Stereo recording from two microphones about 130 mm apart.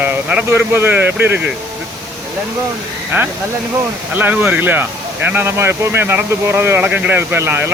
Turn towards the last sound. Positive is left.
turn(degrees=-20)  # may be behind; listen again after turning